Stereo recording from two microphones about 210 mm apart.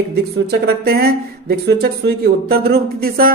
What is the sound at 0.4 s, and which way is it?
Speech, 50° right (ahead or behind).